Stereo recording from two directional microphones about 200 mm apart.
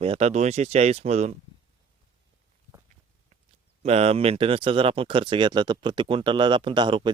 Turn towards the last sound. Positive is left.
turn(degrees=-25)  # may be behind; listen again after turning